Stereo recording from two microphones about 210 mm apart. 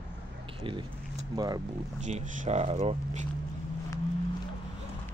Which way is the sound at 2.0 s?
35° right (ahead or behind).